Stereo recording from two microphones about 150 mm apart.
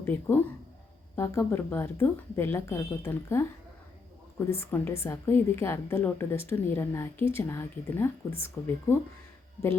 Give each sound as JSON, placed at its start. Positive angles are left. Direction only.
{"t": 0.0, "sound": "a woman's voice", "side_deg": 15}